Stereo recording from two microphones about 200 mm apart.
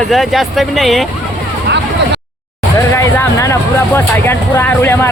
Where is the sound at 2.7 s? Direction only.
15° left (ahead or behind).